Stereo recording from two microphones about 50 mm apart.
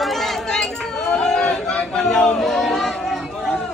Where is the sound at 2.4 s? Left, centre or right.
Centre.